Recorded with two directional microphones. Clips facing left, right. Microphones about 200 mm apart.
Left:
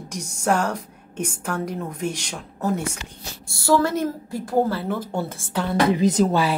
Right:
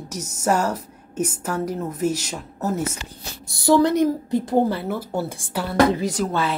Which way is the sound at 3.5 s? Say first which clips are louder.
Right 3 dB; 20° right (ahead or behind).